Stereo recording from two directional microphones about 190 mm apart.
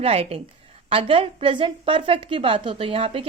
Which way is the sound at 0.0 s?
30° right (ahead or behind).